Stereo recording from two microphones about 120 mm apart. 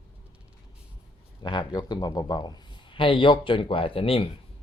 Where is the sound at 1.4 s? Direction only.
40° left (ahead or behind).